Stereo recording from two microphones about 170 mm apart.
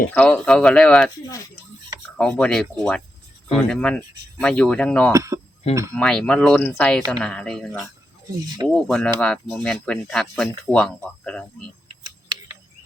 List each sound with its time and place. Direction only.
0.1 s speech: 5° left (ahead or behind)
2.1 s speech: 5° left (ahead or behind)
5.1 s speech: 20° right (ahead or behind)
6.0 s speech: 5° left (ahead or behind)